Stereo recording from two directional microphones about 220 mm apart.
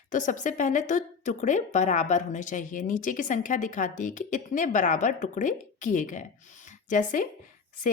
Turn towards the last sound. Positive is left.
turn(degrees=35)  # may be behind; listen again after turning